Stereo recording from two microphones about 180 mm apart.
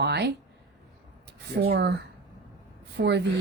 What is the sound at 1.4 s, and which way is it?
Speech, 60° right (ahead or behind).